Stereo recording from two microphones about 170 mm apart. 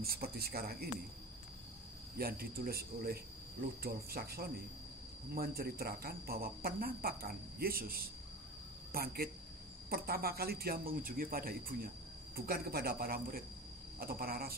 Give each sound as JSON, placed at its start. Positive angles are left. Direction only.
{"t": 0.0, "sound": "speech", "side_deg": -65}
{"t": 2.1, "sound": "speech", "side_deg": -60}